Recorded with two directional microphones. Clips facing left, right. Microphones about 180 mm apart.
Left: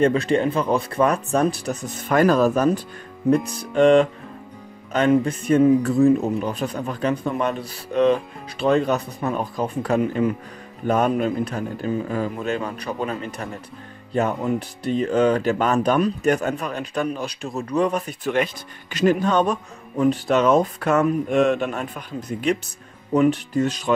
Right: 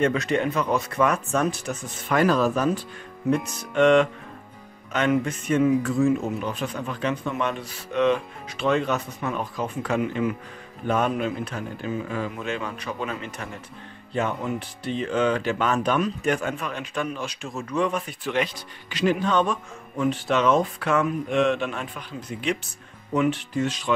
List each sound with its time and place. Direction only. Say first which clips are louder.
0.0 s speech: left 4 dB; 30° left (ahead or behind)